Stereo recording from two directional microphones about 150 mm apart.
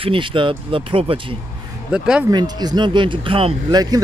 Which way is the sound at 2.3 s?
30° right (ahead or behind).